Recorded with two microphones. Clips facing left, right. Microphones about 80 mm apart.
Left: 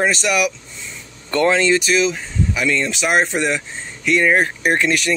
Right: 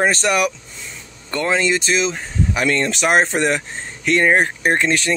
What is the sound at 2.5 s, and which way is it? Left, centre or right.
Speech, right.